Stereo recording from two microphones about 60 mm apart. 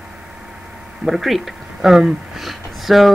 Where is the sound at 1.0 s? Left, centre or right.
Centre.